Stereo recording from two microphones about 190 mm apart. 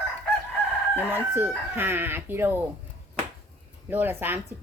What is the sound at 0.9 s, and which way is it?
A woman's voice, 10° right (ahead or behind).